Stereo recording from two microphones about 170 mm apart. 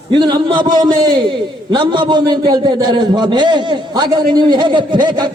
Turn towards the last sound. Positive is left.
turn(degrees=-25)  # may be behind; listen again after turning